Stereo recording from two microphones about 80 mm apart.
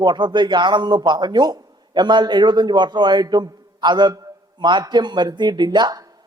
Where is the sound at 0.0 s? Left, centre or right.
Right.